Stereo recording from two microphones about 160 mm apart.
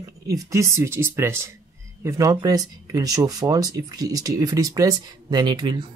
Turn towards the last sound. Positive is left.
turn(degrees=-25)  # may be behind; listen again after turning